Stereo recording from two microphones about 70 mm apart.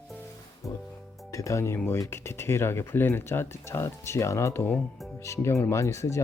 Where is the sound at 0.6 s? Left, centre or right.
Left.